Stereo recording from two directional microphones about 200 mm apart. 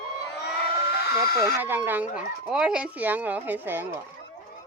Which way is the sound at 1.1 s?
15° right (ahead or behind).